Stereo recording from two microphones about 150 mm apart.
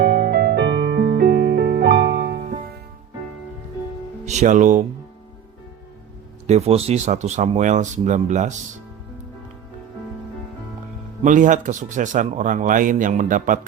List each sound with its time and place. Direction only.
0.0 s music: 90° right; by 2.7 s 75° right (ahead or behind)
4.3 s speech: 55° right (ahead or behind)
6.5 s speech: 45° right (ahead or behind)
11.2 s speech: 60° right (ahead or behind)